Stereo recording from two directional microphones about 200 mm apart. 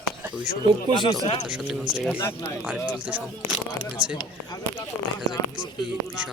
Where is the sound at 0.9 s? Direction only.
20° left (ahead or behind).